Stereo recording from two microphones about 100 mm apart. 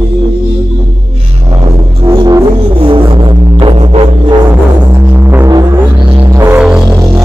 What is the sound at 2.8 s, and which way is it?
Music, 60° right (ahead or behind).